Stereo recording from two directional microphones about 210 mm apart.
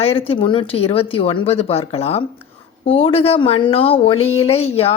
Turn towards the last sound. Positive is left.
turn(degrees=30)  # may be behind; listen again after turning